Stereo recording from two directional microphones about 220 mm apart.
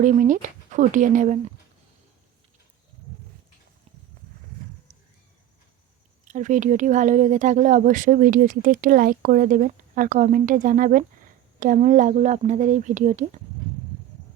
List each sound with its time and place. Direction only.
0.0 s speech: 35° right (ahead or behind)
6.2 s speech: 35° right (ahead or behind)